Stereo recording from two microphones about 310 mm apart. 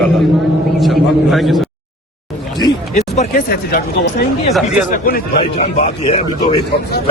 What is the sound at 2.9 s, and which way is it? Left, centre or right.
A man's voice, left.